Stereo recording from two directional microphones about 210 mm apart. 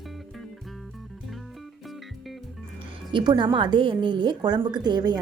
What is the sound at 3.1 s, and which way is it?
A woman's voice, 20° right (ahead or behind).